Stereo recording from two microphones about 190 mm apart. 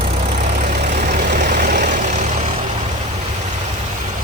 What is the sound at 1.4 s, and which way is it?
Vehicle, 45° right (ahead or behind).